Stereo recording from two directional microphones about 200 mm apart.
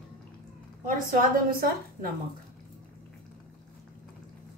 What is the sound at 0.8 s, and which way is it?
A woman's voice, 45° right (ahead or behind).